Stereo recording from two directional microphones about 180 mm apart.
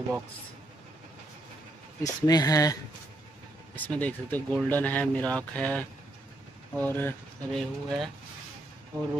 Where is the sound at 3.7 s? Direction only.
10° left (ahead or behind).